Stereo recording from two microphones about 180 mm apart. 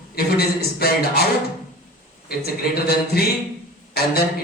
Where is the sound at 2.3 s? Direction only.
60° left (ahead or behind).